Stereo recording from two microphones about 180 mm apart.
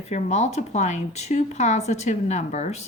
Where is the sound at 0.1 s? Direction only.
40° left (ahead or behind).